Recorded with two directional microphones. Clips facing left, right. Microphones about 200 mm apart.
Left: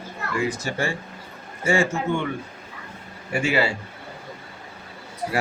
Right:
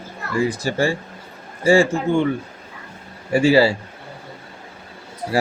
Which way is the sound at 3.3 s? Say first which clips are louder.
Right 8 dB; 35° right (ahead or behind).